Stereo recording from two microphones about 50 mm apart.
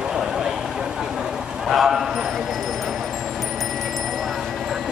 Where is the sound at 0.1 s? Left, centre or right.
Centre.